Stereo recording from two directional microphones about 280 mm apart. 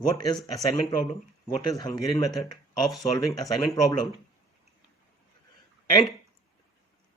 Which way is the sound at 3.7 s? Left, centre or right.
Centre.